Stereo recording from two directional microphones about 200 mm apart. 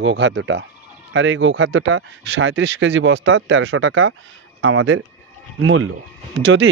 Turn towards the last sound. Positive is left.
turn(degrees=-70)  # may be behind; listen again after turning